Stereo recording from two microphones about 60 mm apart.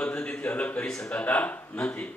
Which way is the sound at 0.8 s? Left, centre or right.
Centre.